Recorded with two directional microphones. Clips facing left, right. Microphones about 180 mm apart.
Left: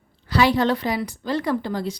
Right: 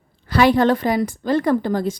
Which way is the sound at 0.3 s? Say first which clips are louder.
Right 4 dB; 50° right (ahead or behind).